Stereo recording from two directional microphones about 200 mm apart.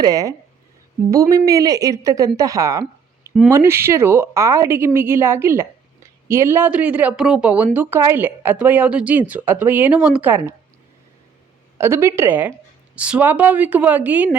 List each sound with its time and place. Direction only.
0.0 s speech: 15° right (ahead or behind)
11.8 s speech: 10° right (ahead or behind)